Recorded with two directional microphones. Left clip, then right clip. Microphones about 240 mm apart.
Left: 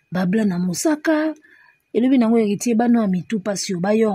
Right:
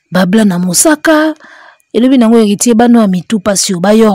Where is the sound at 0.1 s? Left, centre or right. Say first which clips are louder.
Right 12 dB; right.